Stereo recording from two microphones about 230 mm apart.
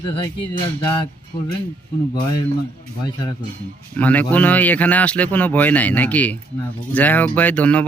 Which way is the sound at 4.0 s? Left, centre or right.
Centre.